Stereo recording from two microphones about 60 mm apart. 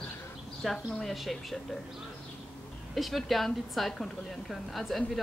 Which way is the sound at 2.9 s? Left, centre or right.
Centre.